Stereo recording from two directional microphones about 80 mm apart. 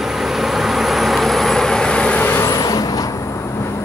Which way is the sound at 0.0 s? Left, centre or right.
Centre.